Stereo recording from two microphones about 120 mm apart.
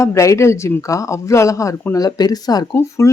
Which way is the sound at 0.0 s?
25° left (ahead or behind).